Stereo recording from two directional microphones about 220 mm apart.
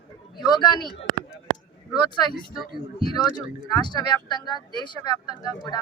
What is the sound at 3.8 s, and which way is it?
Speech, 20° left (ahead or behind).